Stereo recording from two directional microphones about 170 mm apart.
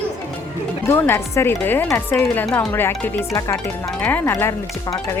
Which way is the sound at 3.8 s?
10° left (ahead or behind).